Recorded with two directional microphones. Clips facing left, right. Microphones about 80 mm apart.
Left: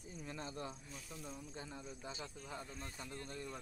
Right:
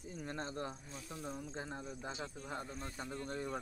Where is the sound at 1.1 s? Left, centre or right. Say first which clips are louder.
Right 6 dB; right.